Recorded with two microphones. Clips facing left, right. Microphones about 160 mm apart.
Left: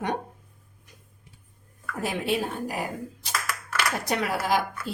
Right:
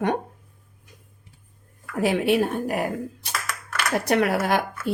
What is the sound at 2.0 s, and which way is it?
Speech, 70° right (ahead or behind).